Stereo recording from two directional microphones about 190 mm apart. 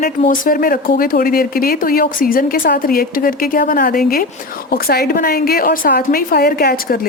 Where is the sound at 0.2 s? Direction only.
45° left (ahead or behind).